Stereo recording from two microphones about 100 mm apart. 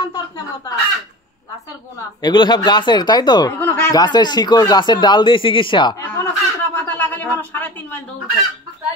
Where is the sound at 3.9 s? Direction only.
45° left (ahead or behind).